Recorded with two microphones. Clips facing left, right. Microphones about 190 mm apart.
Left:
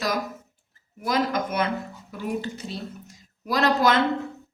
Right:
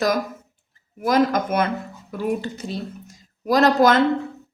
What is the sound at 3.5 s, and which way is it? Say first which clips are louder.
Speech: right 5 dB; 45° right (ahead or behind).